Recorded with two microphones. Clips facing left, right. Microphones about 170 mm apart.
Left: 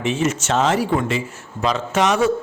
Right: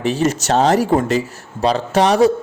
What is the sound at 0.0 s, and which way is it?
A man's voice, 35° right (ahead or behind).